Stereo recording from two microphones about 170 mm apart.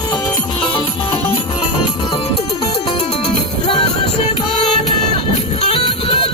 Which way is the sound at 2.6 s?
30° left (ahead or behind).